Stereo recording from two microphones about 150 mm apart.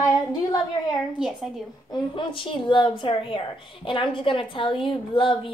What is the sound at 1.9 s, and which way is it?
A woman's voice, 30° left (ahead or behind).